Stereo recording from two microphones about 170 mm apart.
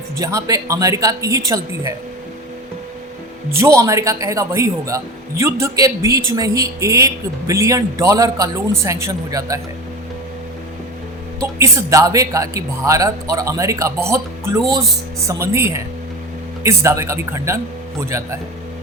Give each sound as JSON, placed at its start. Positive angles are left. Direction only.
{"t": 0.2, "sound": "speech", "side_deg": -20}
{"t": 3.5, "sound": "a man's voice", "side_deg": -15}
{"t": 11.3, "sound": "a man's voice", "side_deg": -15}